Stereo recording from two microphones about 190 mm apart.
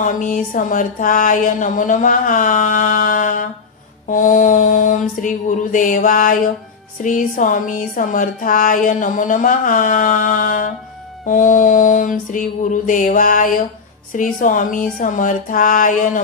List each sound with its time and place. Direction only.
0.0 s speech: 45° left (ahead or behind)